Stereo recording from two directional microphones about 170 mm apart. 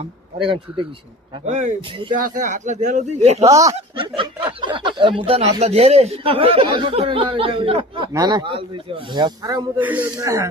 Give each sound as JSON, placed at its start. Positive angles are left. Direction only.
{"t": 0.0, "sound": "speech", "side_deg": -30}
{"t": 1.5, "sound": "speech", "side_deg": -45}
{"t": 1.9, "sound": "a man's voice", "side_deg": -30}
{"t": 2.1, "sound": "speech", "side_deg": -50}
{"t": 3.4, "sound": "a man's voice", "side_deg": -20}
{"t": 9.8, "sound": "speech", "side_deg": -10}